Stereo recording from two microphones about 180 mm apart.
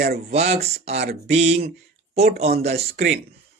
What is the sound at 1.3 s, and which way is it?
Speech, 35° right (ahead or behind).